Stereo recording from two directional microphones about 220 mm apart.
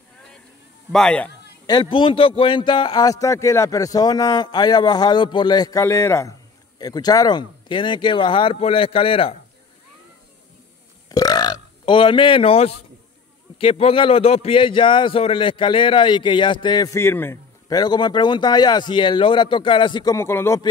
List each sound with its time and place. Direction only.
0.9 s a man's voice: 5° left (ahead or behind)
1.7 s a man's voice: 20° left (ahead or behind)
11.1 s burping: 15° left (ahead or behind)
13.6 s a man's voice: 25° left (ahead or behind)